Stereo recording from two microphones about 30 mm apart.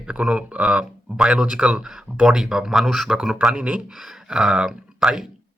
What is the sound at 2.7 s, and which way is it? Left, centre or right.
Speech, centre.